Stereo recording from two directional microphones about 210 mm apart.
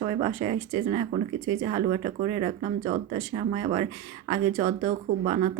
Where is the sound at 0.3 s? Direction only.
20° right (ahead or behind).